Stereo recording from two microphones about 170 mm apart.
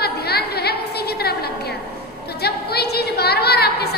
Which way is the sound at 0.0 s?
70° left (ahead or behind).